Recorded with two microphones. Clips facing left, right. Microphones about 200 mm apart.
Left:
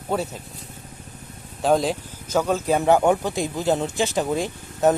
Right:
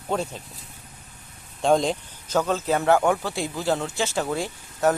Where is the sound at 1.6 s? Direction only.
5° left (ahead or behind).